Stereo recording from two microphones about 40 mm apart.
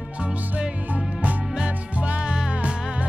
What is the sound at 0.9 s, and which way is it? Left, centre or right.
Music, right.